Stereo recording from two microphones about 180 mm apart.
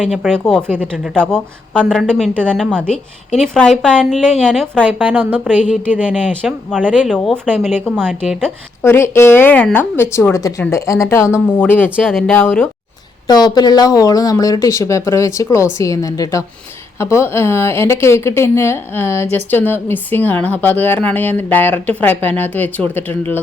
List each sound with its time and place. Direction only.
0.0 s a woman's voice: 5° left (ahead or behind)
4.9 s a woman's voice: 10° right (ahead or behind)
6.0 s a woman's voice: 5° left (ahead or behind)
6.7 s a woman's voice: 10° right (ahead or behind)
7.1 s a woman's voice: 5° left (ahead or behind)
12.0 s a woman's voice: centre (ahead or behind)
12.3 s speech: 10° left (ahead or behind)
13.2 s speech: 20° left (ahead or behind)